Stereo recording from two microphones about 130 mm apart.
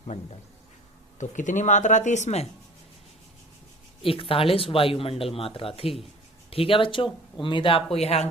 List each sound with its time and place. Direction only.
1.2 s speech: 70° left (ahead or behind)
4.0 s speech: 45° left (ahead or behind)
7.9 s speech: 50° left (ahead or behind)